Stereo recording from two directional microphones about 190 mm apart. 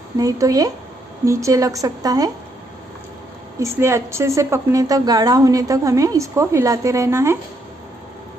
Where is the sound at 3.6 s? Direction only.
15° right (ahead or behind).